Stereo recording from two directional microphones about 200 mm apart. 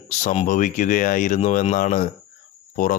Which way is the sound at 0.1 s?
35° left (ahead or behind).